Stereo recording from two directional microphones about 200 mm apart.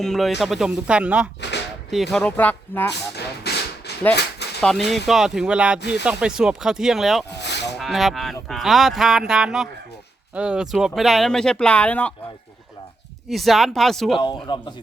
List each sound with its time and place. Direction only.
0.0 s speech: centre (ahead or behind)
3.2 s a sound: 55° left (ahead or behind)
4.6 s speech: centre (ahead or behind)
7.4 s a sound: 60° left (ahead or behind)
7.8 s speech: centre (ahead or behind)
13.2 s speech: centre (ahead or behind)
14.2 s speech: 20° left (ahead or behind)